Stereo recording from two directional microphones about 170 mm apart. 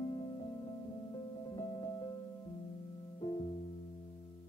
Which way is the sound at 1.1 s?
20° left (ahead or behind).